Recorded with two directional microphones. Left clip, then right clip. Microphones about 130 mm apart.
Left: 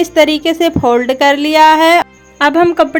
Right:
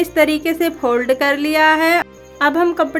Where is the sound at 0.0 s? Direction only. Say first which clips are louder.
Left 5 dB; 25° left (ahead or behind).